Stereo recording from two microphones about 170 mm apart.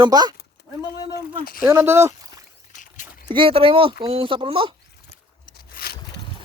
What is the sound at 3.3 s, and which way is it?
Speech, 30° right (ahead or behind).